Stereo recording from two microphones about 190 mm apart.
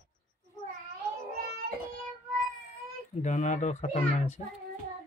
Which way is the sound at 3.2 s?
40° left (ahead or behind).